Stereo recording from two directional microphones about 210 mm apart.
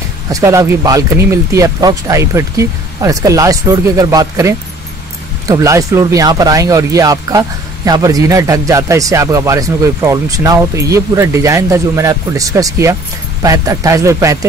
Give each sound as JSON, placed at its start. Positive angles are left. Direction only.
{"t": 0.3, "sound": "speech", "side_deg": -15}